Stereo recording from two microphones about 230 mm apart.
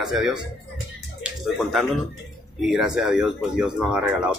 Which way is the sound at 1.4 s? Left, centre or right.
Centre.